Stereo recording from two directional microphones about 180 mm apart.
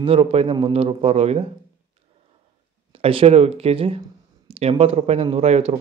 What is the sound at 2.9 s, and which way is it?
Speech, 30° right (ahead or behind).